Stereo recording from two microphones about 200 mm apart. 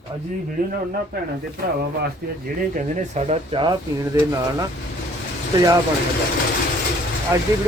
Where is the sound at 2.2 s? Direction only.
45° right (ahead or behind).